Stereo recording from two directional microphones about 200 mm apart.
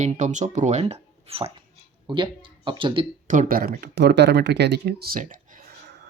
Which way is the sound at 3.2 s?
45° right (ahead or behind).